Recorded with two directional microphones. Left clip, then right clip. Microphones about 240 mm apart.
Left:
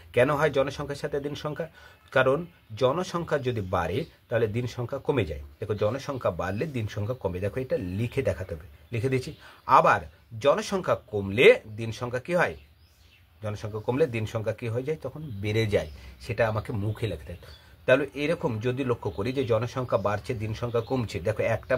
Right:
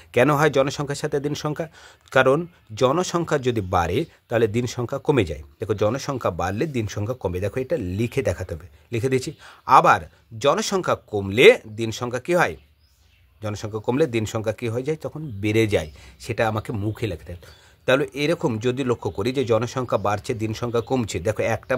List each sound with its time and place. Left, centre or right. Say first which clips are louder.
0.1 s speech: right 5 dB; right